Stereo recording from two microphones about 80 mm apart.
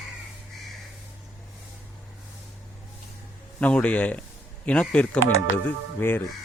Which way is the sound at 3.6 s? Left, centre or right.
Centre.